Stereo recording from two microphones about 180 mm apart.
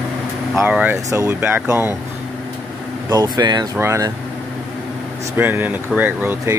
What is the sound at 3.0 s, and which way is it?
Speech, 25° right (ahead or behind).